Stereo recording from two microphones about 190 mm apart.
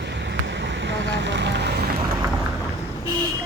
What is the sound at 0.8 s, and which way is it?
Speech, 65° right (ahead or behind).